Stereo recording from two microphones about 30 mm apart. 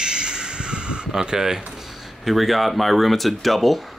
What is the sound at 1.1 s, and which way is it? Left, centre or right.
Speech, centre.